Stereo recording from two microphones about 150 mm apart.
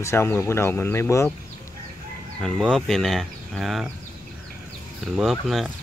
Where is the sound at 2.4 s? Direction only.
5° left (ahead or behind).